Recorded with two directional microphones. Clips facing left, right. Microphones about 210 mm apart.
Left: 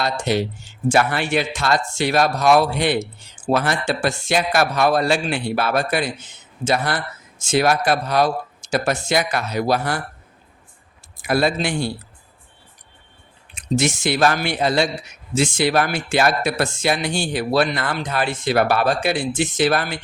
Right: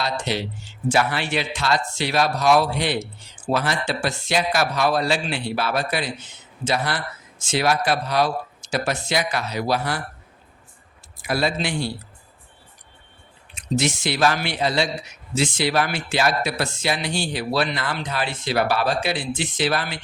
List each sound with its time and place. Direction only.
0.0 s speech: 50° left (ahead or behind)
11.2 s speech: 50° left (ahead or behind)
13.7 s speech: 45° left (ahead or behind)